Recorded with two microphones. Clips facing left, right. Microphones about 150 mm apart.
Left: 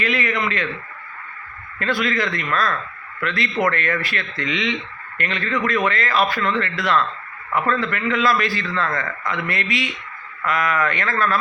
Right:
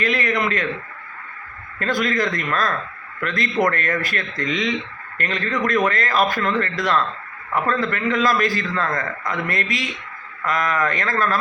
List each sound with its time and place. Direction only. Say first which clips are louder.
0.0 s a man's voice: right 1 dB; 40° right (ahead or behind)
1.8 s a man's voice: right 1 dB; 40° right (ahead or behind)